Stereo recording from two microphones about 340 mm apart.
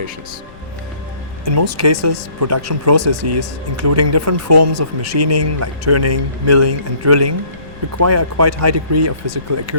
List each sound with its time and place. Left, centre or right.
1.5 s a man's voice: right
3.0 s speech: right
3.2 s a man's voice: right